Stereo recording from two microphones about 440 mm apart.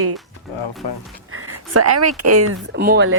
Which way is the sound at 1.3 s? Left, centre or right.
Right.